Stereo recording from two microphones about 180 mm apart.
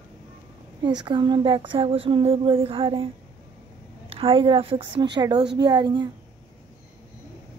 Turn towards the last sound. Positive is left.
turn(degrees=-25)  # may be behind; listen again after turning